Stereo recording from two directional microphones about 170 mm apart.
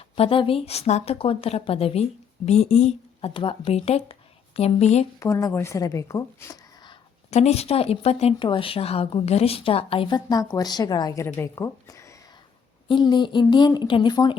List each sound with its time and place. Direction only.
0.0 s speech: 35° left (ahead or behind)
5.2 s speech: 20° left (ahead or behind)
7.3 s a woman's voice: 40° left (ahead or behind)